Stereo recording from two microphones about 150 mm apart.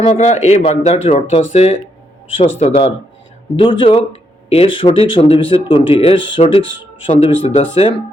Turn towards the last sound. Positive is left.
turn(degrees=40)  # may be behind; listen again after turning